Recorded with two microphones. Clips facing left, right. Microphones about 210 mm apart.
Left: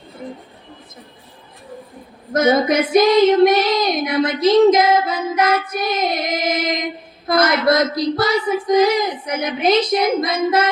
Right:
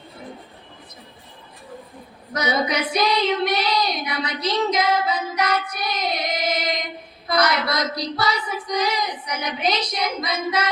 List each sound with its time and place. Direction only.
2.3 s female singing: 50° left (ahead or behind)